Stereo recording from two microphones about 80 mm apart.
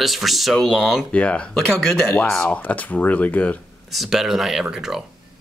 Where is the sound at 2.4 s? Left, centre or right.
Centre.